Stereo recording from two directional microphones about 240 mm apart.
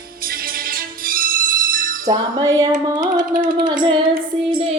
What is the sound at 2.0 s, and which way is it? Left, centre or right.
Music, centre.